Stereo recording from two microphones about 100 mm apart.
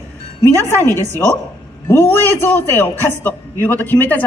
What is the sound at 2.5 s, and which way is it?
A woman's voice, 20° left (ahead or behind).